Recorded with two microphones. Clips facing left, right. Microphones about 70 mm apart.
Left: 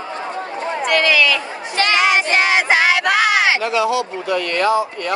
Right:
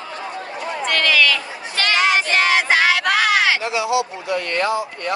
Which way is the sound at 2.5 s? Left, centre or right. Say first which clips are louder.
Left 2 dB; centre.